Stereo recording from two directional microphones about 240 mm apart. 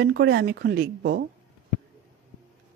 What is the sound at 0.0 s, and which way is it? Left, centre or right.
Speech, right.